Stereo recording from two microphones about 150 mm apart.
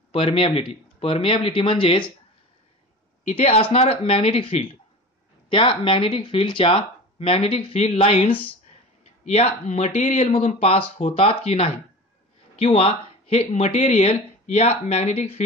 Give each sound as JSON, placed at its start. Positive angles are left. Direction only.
{"t": 0.1, "sound": "speech", "side_deg": 35}
{"t": 3.3, "sound": "speech", "side_deg": 40}